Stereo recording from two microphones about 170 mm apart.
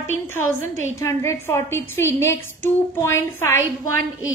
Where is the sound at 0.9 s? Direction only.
15° left (ahead or behind).